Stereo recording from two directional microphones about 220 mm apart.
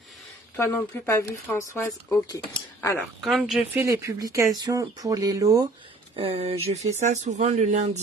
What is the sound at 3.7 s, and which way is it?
Speech, 15° right (ahead or behind).